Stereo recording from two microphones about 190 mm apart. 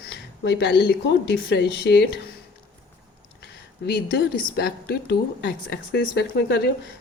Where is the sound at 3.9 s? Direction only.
60° left (ahead or behind).